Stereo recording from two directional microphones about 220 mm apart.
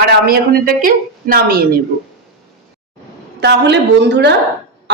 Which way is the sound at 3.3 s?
50° right (ahead or behind).